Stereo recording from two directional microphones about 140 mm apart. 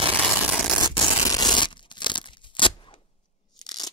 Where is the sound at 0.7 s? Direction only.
30° left (ahead or behind).